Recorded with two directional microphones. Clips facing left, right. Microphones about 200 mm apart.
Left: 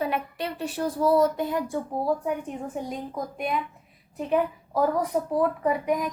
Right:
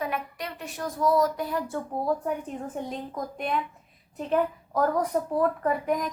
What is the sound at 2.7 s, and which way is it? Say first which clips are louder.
A woman's voice: left 2 dB; 5° left (ahead or behind).